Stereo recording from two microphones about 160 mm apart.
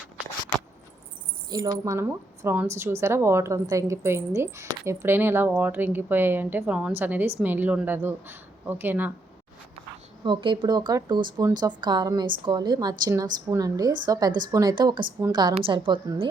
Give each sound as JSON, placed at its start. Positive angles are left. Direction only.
{"t": 1.5, "sound": "a woman's voice", "side_deg": -25}
{"t": 10.2, "sound": "a woman's voice", "side_deg": -30}